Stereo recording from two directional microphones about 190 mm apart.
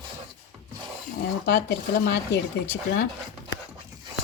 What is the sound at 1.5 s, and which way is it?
Speech, 65° left (ahead or behind).